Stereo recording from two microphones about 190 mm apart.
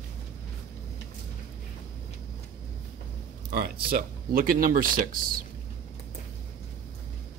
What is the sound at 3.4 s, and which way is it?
Speech, 55° right (ahead or behind).